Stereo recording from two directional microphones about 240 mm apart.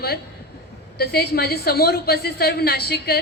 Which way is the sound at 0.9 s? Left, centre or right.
Left.